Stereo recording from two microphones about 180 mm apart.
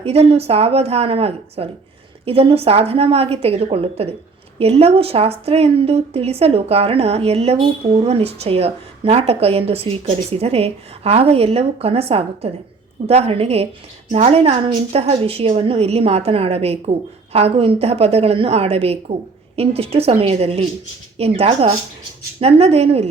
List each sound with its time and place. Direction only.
0.0 s a woman's voice: 35° right (ahead or behind)